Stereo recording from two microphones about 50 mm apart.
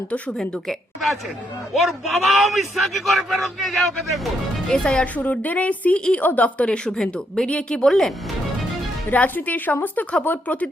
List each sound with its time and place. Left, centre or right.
0.3 s a man's voice: centre
4.7 s speech: centre
5.1 s a woman's voice: left
6.8 s speech: centre
9.1 s a woman's voice: left